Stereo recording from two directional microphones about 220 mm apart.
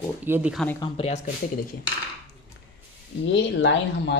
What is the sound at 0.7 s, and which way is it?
Speech, 25° left (ahead or behind).